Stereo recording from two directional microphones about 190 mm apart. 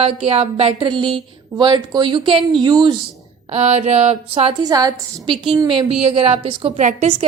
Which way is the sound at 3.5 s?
35° right (ahead or behind).